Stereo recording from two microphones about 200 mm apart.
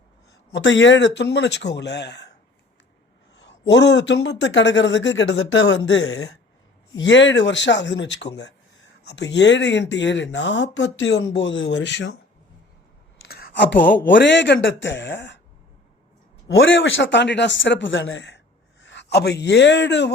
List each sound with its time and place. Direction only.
0.5 s speech: 65° left (ahead or behind)
3.7 s speech: 60° left (ahead or behind)
13.2 s speech: 50° left (ahead or behind)
16.6 s speech: 70° left (ahead or behind)